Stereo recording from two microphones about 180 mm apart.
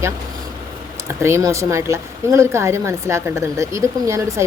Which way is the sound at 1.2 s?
15° right (ahead or behind).